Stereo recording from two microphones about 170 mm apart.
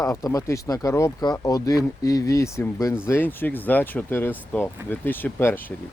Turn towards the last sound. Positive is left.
turn(degrees=15)  # may be behind; listen again after turning